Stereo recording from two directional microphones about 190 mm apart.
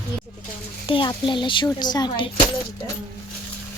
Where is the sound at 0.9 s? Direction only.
25° left (ahead or behind).